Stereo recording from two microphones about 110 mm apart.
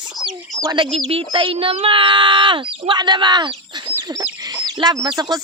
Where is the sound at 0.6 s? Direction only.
45° right (ahead or behind).